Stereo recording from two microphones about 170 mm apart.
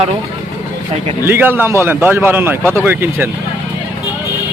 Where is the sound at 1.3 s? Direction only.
10° right (ahead or behind).